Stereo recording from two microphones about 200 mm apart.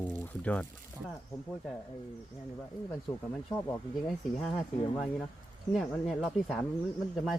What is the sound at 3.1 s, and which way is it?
Speech, 10° left (ahead or behind).